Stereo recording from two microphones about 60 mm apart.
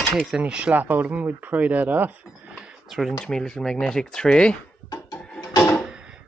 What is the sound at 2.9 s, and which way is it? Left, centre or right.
Speech, centre.